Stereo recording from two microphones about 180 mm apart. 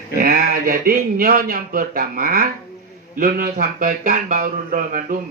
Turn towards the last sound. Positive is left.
turn(degrees=-50)  # may be behind; listen again after turning